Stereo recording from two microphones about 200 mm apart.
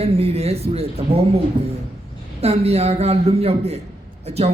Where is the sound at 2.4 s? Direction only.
30° right (ahead or behind).